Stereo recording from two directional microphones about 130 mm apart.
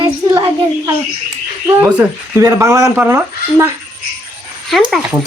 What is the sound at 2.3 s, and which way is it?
Speech, 20° right (ahead or behind).